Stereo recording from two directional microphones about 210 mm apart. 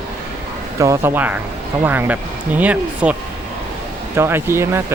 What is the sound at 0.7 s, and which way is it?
Speech, 15° right (ahead or behind).